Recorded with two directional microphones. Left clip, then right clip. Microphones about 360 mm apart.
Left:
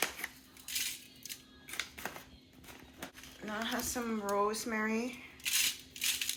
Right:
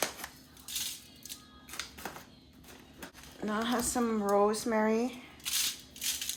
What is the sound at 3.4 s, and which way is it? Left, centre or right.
Speech, right.